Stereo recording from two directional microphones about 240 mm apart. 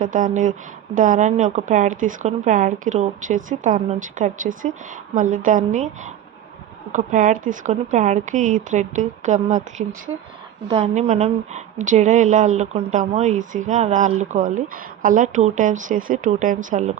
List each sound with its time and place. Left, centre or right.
0.0 s speech: right